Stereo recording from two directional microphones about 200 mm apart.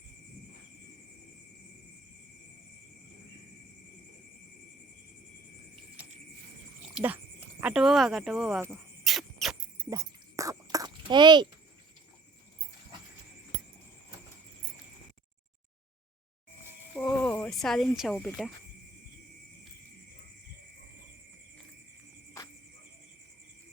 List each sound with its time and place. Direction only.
6.9 s speech: 5° right (ahead or behind)
9.0 s insect: centre (ahead or behind)
9.9 s a sound: 15° right (ahead or behind)
16.9 s cricket: 5° left (ahead or behind)